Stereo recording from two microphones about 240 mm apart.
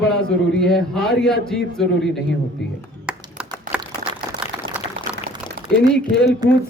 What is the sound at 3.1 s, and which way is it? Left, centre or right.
Clapping, centre.